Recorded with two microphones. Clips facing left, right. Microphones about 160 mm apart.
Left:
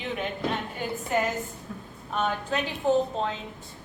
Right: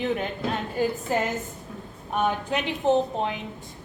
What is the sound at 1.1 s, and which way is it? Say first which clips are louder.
Speech: left 2 dB; 30° right (ahead or behind).